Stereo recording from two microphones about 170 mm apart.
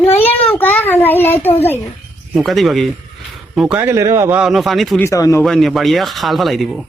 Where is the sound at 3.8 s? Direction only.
15° right (ahead or behind).